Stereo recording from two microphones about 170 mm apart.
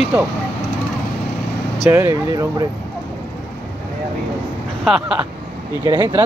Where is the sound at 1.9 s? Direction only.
15° right (ahead or behind).